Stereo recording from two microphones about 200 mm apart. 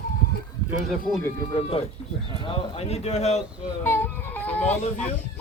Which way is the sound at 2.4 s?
30° left (ahead or behind).